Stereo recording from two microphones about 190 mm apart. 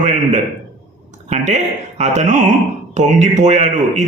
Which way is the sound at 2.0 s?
40° right (ahead or behind).